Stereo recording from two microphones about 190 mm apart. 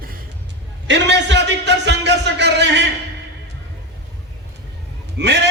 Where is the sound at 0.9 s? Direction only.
65° right (ahead or behind).